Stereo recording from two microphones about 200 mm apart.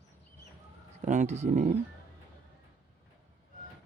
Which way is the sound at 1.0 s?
35° right (ahead or behind).